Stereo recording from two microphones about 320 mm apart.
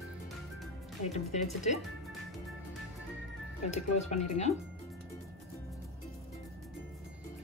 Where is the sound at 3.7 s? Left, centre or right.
Left.